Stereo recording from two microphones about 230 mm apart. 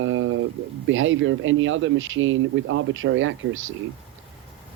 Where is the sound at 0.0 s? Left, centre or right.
Right.